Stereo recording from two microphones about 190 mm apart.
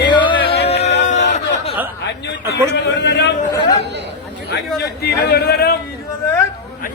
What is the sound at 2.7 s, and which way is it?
Speech, 65° left (ahead or behind).